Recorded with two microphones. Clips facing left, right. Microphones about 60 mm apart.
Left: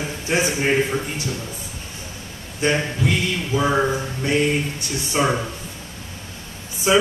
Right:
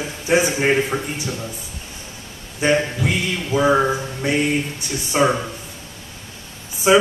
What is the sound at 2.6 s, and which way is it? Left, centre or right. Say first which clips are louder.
A man's voice: right 3 dB; centre.